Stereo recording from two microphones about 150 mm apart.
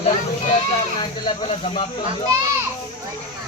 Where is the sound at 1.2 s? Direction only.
35° left (ahead or behind).